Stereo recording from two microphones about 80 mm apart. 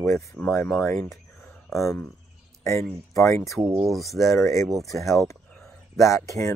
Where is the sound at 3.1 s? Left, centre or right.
Left.